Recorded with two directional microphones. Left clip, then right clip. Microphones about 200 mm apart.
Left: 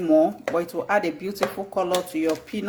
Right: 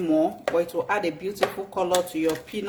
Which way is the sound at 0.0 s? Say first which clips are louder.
Left 4 dB; 20° left (ahead or behind).